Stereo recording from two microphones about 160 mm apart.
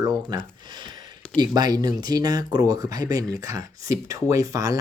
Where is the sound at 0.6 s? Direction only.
25° right (ahead or behind).